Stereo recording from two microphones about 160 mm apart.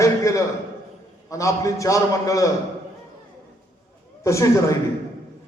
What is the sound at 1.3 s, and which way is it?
A man's voice, 20° left (ahead or behind).